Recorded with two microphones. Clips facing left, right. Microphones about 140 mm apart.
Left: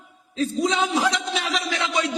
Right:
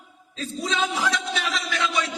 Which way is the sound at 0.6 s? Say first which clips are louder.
Left 2 dB; 20° left (ahead or behind).